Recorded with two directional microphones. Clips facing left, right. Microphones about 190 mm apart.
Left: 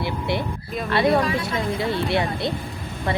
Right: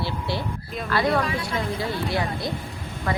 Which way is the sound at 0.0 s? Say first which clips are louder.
Left 3 dB; 20° left (ahead or behind).